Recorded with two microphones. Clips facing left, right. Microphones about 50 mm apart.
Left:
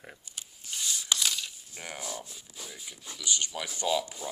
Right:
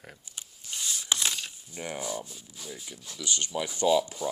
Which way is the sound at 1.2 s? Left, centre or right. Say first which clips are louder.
Even; right.